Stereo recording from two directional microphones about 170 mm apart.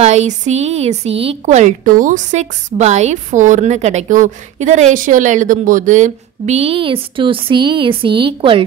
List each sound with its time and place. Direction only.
0.0 s a woman's voice: 40° right (ahead or behind)